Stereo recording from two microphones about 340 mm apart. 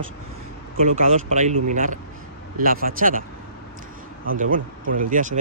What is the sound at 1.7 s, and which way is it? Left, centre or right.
Speech, right.